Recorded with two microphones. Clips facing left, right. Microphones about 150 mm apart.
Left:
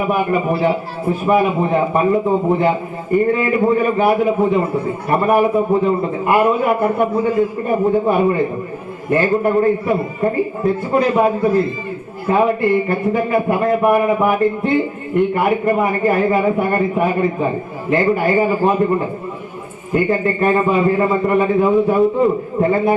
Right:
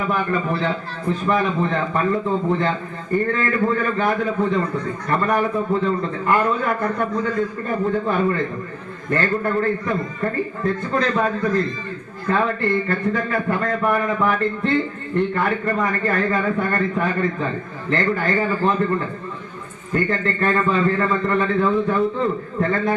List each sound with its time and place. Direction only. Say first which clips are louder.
0.0 s a man's voice: left 5 dB; 15° left (ahead or behind)